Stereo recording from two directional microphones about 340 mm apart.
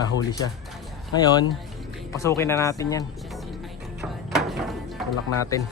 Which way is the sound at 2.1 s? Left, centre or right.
Centre.